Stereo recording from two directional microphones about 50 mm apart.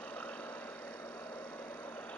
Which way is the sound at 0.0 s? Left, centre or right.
Left.